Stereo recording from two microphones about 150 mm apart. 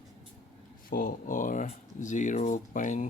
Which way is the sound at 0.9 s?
70° left (ahead or behind).